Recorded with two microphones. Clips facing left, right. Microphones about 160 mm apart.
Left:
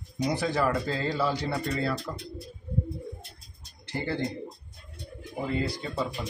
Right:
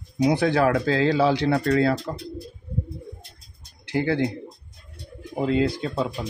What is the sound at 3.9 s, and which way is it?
Speech, 70° right (ahead or behind).